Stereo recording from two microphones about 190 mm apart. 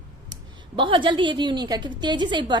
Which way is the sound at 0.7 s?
25° right (ahead or behind).